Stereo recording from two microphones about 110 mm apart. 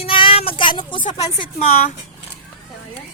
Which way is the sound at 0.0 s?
55° left (ahead or behind).